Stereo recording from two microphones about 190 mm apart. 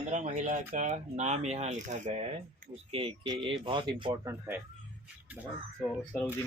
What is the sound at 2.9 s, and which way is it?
Speech, 30° right (ahead or behind).